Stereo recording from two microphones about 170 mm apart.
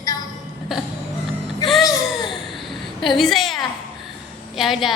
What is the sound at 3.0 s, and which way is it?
Speech, centre (ahead or behind).